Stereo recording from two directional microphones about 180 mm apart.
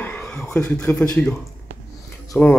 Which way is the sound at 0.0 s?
5° left (ahead or behind).